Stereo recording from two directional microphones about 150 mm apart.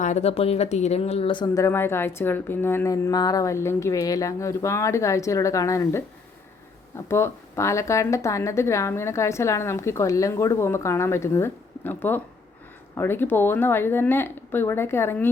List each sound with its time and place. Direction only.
0.0 s speech: 50° left (ahead or behind)
1.5 s a woman's voice: 15° left (ahead or behind)
7.1 s a woman's voice: 20° left (ahead or behind)